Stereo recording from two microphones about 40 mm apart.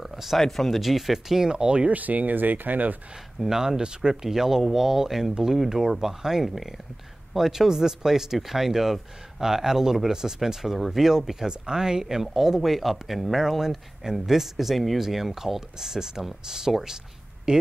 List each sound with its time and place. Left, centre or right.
0.0 s a sound: centre
0.4 s speech: centre; by 1.9 s right
1.9 s speech: right
3.3 s speech: centre